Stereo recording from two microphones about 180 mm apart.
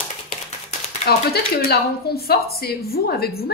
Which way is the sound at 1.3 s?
60° left (ahead or behind).